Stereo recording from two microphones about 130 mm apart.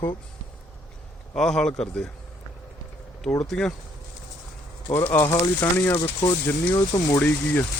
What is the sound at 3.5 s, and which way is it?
Speech, 5° left (ahead or behind).